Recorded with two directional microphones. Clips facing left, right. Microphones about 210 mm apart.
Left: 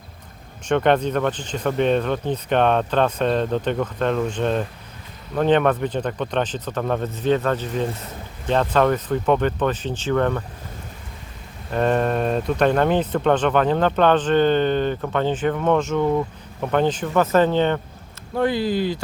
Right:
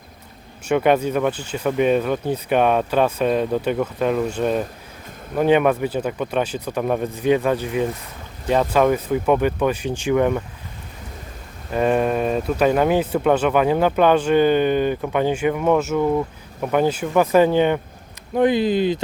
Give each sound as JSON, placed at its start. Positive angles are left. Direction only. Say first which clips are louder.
{"t": 0.7, "sound": "speech", "louder": "right 1 dB", "side_deg": -10}
{"t": 11.7, "sound": "speech", "louder": "right 1 dB", "side_deg": -5}